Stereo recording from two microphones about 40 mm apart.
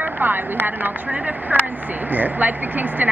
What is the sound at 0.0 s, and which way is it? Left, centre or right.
Speech, right.